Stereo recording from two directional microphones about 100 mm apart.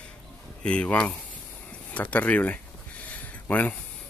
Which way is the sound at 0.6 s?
10° left (ahead or behind).